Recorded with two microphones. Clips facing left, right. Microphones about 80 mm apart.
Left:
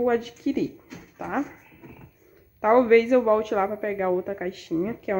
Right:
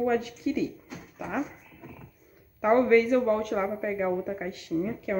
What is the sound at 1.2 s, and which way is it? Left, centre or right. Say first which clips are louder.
Speech: left 4 dB; left.